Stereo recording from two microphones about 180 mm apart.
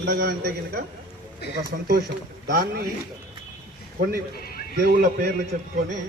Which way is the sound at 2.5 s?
60° right (ahead or behind).